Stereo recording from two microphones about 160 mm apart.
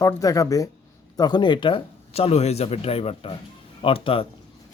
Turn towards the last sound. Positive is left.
turn(degrees=35)  # may be behind; listen again after turning